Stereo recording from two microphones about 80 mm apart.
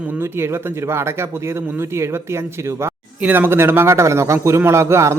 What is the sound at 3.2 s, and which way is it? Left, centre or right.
Speech, right.